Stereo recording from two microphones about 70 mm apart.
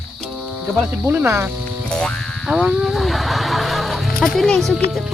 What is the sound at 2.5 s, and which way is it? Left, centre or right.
Speech, centre.